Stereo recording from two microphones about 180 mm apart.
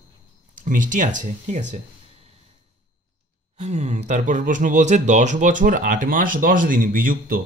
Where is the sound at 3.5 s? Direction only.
40° right (ahead or behind).